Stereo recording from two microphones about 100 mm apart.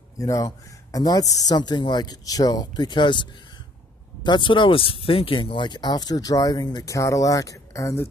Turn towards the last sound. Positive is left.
turn(degrees=35)  # may be behind; listen again after turning